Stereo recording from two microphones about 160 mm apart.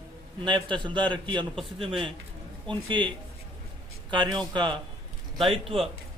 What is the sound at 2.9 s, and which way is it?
A man's voice, 30° right (ahead or behind).